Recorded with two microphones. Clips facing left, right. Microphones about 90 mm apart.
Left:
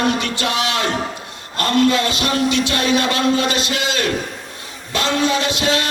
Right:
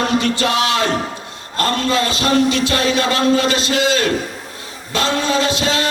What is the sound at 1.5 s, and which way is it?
Music, 30° right (ahead or behind).